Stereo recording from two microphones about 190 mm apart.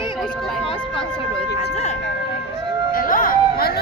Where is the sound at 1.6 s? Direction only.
35° left (ahead or behind).